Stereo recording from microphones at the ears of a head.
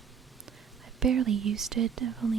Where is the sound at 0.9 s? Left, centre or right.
Right.